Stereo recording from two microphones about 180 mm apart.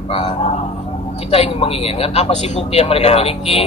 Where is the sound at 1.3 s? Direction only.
35° left (ahead or behind).